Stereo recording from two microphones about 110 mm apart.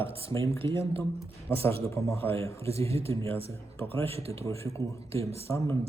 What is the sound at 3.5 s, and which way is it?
Speech, 25° left (ahead or behind).